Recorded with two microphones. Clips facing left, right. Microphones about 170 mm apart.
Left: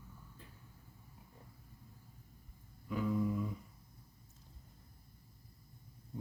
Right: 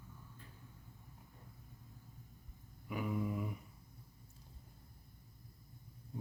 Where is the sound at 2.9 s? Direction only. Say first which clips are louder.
Left 4 dB; 15° right (ahead or behind).